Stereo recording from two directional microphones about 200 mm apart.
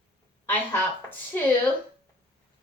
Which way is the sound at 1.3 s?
10° left (ahead or behind).